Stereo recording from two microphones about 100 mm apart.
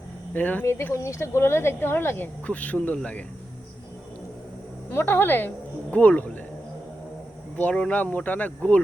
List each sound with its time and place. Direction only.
0.3 s speech: 15° left (ahead or behind)
0.6 s speech: 25° left (ahead or behind)
4.9 s speech: 20° left (ahead or behind)
7.5 s speech: 15° left (ahead or behind)